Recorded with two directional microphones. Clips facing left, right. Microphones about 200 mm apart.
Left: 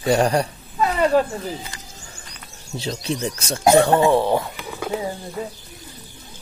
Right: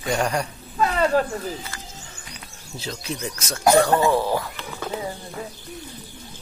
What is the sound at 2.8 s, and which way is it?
Speech, 30° left (ahead or behind).